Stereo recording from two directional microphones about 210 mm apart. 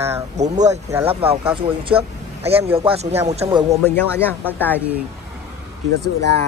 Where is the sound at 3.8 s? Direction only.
10° left (ahead or behind).